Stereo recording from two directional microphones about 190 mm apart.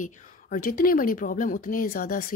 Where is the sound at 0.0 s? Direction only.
45° left (ahead or behind).